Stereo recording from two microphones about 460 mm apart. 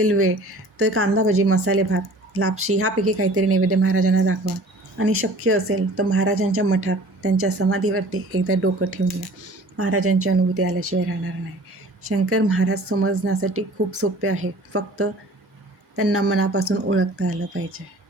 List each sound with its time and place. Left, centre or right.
0.0 s speech: right
12.0 s speech: right